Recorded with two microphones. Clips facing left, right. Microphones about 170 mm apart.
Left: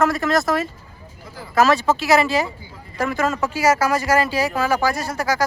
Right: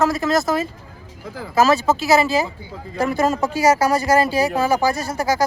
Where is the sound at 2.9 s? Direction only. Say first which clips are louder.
Right 3 dB; 35° right (ahead or behind).